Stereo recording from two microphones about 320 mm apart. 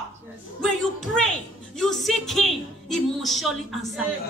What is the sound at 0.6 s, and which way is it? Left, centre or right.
Child singing, centre.